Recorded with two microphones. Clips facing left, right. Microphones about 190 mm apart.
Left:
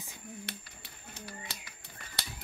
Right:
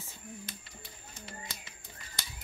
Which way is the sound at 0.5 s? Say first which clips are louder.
Left 3 dB; 70° left (ahead or behind).